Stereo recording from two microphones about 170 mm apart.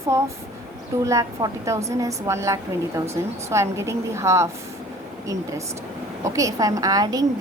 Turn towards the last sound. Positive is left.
turn(degrees=-20)  # may be behind; listen again after turning